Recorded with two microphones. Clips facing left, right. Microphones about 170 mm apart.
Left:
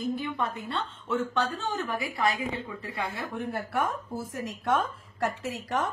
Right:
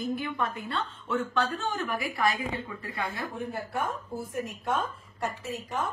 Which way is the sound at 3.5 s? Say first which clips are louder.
Left 5 dB; 75° left (ahead or behind).